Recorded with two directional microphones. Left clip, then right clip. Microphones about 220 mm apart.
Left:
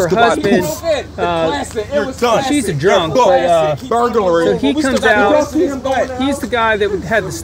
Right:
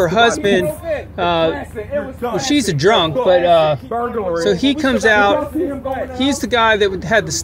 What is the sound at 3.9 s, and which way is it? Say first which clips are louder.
Speech: left 7 dB; 35° left (ahead or behind).